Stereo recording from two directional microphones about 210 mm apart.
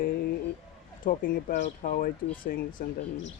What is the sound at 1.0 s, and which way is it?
Speech, 40° left (ahead or behind).